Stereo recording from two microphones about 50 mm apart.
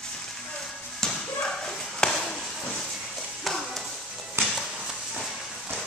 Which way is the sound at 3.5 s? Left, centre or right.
Centre.